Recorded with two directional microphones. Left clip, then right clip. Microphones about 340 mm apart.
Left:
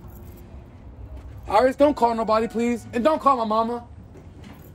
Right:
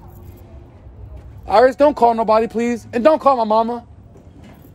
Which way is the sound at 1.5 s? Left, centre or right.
Centre.